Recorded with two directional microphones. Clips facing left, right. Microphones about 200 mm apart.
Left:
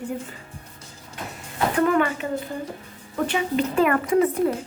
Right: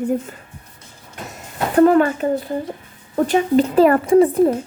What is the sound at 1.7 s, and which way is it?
Speech, 35° right (ahead or behind).